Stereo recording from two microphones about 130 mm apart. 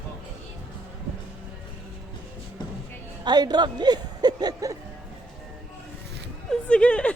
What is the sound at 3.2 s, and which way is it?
Speech, 35° right (ahead or behind).